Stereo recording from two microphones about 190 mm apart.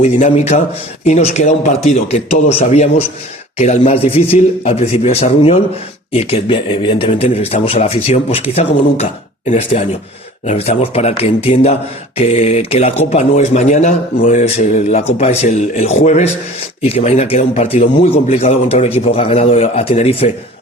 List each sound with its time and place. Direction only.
0.0 s a man's voice: 35° left (ahead or behind)